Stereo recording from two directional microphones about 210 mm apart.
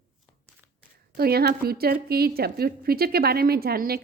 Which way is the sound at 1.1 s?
45° right (ahead or behind).